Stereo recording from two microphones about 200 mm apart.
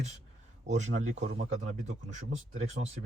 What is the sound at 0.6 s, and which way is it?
Speech, 35° right (ahead or behind).